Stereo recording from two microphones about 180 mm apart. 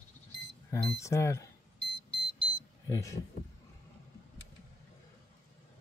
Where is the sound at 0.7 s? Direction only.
15° left (ahead or behind).